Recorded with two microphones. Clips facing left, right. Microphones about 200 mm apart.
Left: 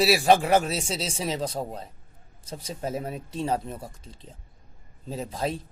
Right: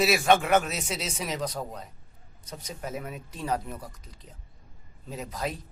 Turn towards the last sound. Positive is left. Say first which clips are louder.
# left 4 dB
turn(degrees=30)  # may be behind; listen again after turning